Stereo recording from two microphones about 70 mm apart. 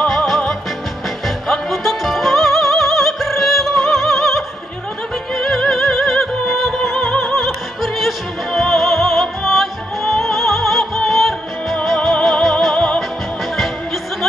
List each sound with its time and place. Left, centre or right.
0.0 s music: centre
6.9 s music: centre
7.2 s opera: centre
12.7 s music: centre